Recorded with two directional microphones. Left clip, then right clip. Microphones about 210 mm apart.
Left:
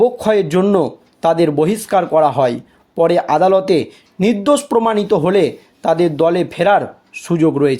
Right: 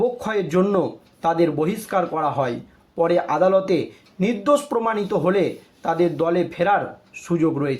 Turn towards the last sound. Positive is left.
turn(degrees=45)  # may be behind; listen again after turning